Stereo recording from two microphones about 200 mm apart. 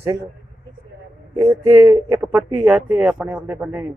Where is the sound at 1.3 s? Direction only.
15° right (ahead or behind).